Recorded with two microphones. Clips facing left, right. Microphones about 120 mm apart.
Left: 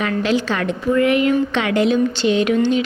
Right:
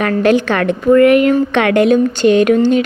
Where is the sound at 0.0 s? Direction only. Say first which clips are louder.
Right 7 dB; 55° right (ahead or behind).